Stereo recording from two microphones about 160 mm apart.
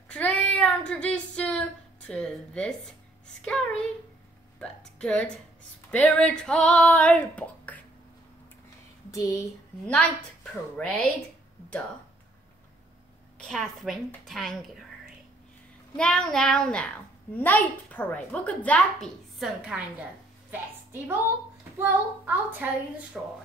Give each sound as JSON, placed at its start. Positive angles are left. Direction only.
{"t": 0.1, "sound": "child singing", "side_deg": 5}
{"t": 4.6, "sound": "a child's voice", "side_deg": 5}
{"t": 9.1, "sound": "speech", "side_deg": 20}
{"t": 9.9, "sound": "a woman's voice", "side_deg": 5}
{"t": 13.4, "sound": "a woman's voice", "side_deg": 0}
{"t": 16.0, "sound": "a woman's voice", "side_deg": 5}
{"t": 21.7, "sound": "a child's voice", "side_deg": -15}